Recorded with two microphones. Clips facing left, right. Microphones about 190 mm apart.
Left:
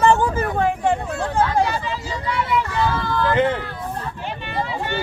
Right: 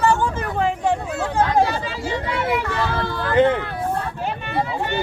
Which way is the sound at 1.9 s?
70° right (ahead or behind).